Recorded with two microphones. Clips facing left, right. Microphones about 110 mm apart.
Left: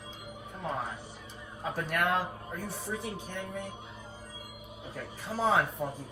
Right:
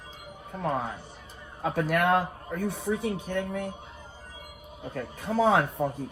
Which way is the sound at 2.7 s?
60° right (ahead or behind).